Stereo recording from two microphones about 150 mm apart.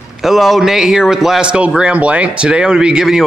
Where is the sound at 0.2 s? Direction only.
Centre (ahead or behind).